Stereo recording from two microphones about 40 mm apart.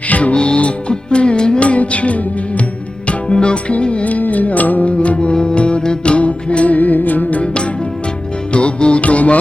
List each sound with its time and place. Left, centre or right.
0.1 s music: left
0.3 s music: left
4.0 s music: left
4.9 s music: left
6.7 s music: left
7.4 s music: left